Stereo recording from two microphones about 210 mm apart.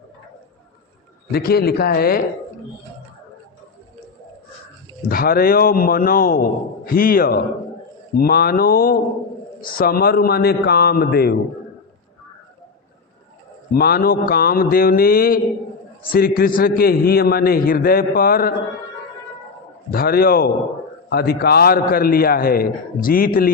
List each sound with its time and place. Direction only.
1.3 s a man's voice: 50° left (ahead or behind)
5.0 s a man's voice: 45° left (ahead or behind)
13.7 s a man's voice: 45° left (ahead or behind)
19.9 s a man's voice: 45° left (ahead or behind)